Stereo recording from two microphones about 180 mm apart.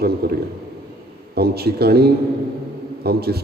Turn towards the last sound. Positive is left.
turn(degrees=-60)  # may be behind; listen again after turning